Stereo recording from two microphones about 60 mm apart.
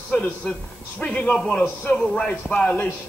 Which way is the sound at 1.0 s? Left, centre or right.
Left.